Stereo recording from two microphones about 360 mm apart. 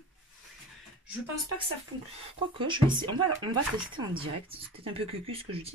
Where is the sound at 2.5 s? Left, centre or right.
Centre.